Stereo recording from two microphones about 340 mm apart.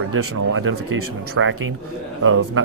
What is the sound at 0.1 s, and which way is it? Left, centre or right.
Speech, right.